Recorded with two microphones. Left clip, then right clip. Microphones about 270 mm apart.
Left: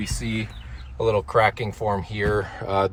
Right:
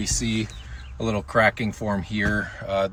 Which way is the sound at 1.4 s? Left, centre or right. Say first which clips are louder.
Even; centre.